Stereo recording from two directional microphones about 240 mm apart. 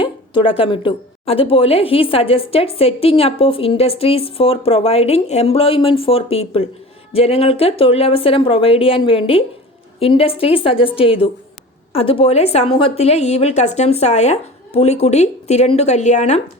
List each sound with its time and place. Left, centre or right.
0.0 s a woman's voice: left